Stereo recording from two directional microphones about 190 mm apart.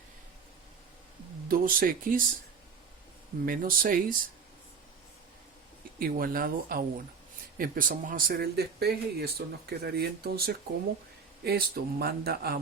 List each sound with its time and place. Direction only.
1.5 s speech: 50° right (ahead or behind)
3.4 s speech: 45° right (ahead or behind)
6.0 s speech: 50° right (ahead or behind)